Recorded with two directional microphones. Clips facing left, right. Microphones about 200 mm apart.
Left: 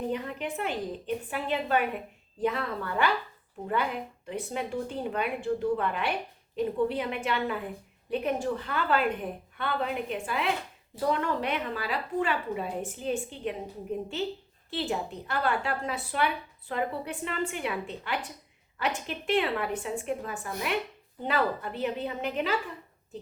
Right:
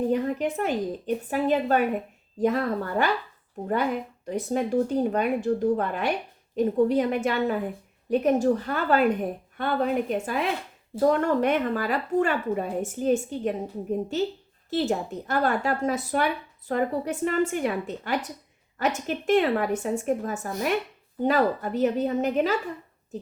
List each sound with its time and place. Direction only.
0.1 s a woman's voice: 40° right (ahead or behind)
4.3 s a woman's voice: 40° right (ahead or behind)